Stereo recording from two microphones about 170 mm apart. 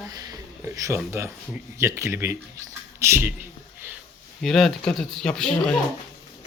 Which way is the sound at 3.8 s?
15° right (ahead or behind).